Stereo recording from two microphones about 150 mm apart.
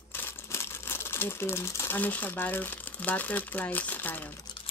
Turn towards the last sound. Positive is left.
turn(degrees=10)  # may be behind; listen again after turning